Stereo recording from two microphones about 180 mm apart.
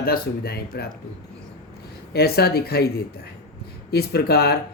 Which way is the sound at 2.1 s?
60° left (ahead or behind).